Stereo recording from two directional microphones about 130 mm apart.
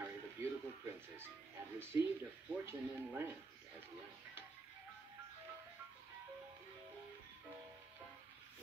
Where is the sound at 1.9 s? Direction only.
20° right (ahead or behind).